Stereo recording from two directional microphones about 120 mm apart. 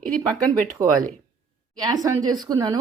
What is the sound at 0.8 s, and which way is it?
Speech, 30° right (ahead or behind).